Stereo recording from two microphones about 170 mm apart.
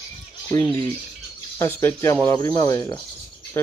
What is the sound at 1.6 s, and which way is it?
Speech, 15° left (ahead or behind).